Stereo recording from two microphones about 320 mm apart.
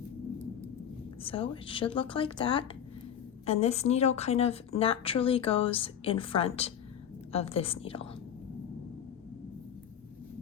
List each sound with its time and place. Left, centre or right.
1.2 s a woman's voice: centre